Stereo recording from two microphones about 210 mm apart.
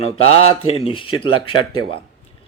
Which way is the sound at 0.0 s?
30° left (ahead or behind).